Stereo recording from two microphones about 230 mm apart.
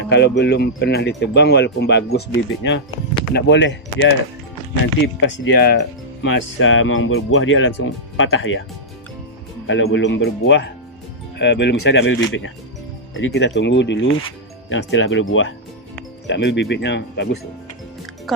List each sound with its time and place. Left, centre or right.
0.0 s speech: left
5.2 s speech: left
6.6 s speech: left
9.6 s speech: left
18.3 s speech: centre